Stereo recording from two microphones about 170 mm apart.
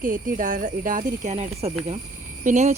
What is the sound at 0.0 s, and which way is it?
Speech, 50° right (ahead or behind).